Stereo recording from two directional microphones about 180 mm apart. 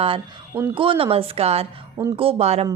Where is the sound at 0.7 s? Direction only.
30° right (ahead or behind).